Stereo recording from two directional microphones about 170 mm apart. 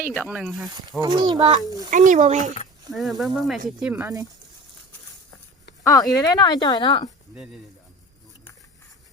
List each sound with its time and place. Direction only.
0.2 s speech: 5° right (ahead or behind)
1.0 s speech: 25° right (ahead or behind)
1.9 s speech: 50° right (ahead or behind)
2.9 s speech: centre (ahead or behind)
5.8 s speech: 20° left (ahead or behind)